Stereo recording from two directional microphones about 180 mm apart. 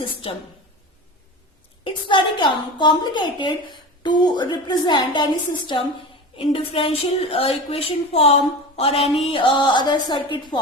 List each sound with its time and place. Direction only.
1.8 s a woman's voice: 25° left (ahead or behind)